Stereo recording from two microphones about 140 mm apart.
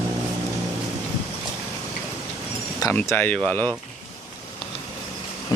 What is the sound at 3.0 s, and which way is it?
Speech, 15° left (ahead or behind).